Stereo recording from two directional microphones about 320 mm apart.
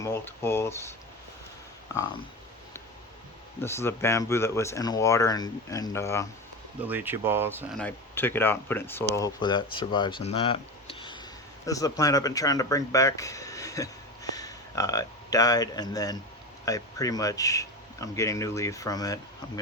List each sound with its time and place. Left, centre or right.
0.0 s speech: centre
3.6 s speech: centre
6.8 s speech: centre
7.9 s speech: centre